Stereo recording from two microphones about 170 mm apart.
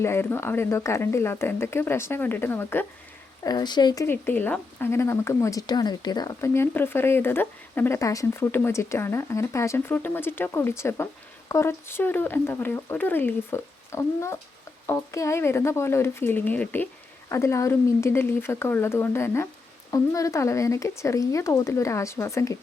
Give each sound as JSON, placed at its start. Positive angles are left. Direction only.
{"t": 0.0, "sound": "speech", "side_deg": 15}
{"t": 3.4, "sound": "speech", "side_deg": 25}
{"t": 4.0, "sound": "speech", "side_deg": 10}